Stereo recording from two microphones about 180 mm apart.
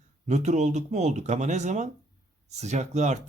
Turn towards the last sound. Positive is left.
turn(degrees=-40)  # may be behind; listen again after turning